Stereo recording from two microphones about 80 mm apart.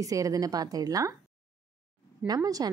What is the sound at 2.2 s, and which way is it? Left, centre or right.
Speech, right.